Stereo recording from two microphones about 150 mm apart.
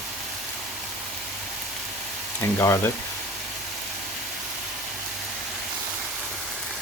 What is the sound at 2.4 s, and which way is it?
Frying, 20° left (ahead or behind).